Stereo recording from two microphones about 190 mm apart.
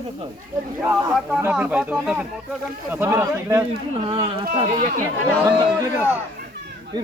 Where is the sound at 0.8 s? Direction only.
10° right (ahead or behind).